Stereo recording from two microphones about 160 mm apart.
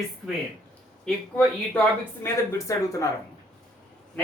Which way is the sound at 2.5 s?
20° left (ahead or behind).